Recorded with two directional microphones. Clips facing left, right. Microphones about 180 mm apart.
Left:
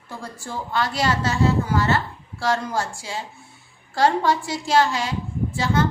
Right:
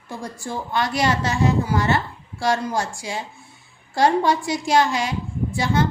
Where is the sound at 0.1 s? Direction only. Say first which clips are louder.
Right 3 dB; 15° right (ahead or behind).